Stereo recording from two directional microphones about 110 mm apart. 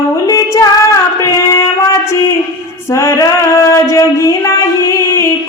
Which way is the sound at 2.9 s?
30° left (ahead or behind).